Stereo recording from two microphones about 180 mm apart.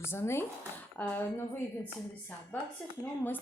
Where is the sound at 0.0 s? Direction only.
15° left (ahead or behind).